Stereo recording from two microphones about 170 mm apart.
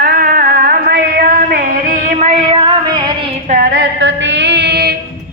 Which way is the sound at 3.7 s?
90° right.